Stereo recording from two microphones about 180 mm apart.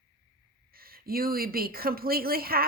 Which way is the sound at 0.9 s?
55° right (ahead or behind).